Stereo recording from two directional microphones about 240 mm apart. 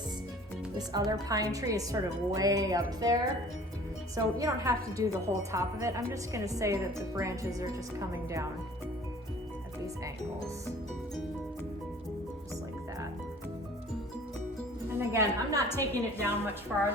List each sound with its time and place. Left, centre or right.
0.8 s a woman's voice: centre
14.8 s a woman's voice: centre
15.7 s a woman's voice: centre